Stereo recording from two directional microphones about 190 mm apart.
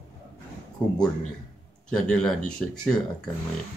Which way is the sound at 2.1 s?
5° left (ahead or behind).